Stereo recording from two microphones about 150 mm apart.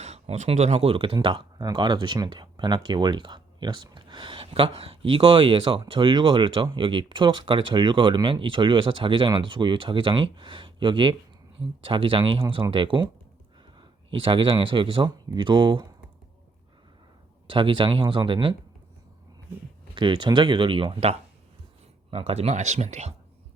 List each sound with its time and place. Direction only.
0.0 s speech: 45° right (ahead or behind); by 15.9 s 30° right (ahead or behind)
17.4 s speech: 35° right (ahead or behind)
20.0 s speech: 30° right (ahead or behind); by 23.1 s 50° right (ahead or behind)